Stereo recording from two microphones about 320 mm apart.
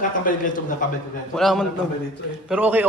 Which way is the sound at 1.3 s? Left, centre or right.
Centre.